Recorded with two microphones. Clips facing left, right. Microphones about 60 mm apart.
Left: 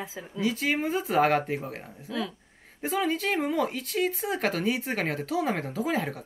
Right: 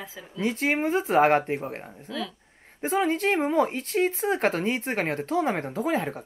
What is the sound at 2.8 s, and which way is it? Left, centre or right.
Speech, centre.